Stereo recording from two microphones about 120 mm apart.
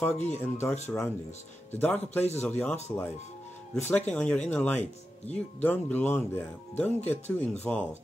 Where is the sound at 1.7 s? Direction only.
15° left (ahead or behind).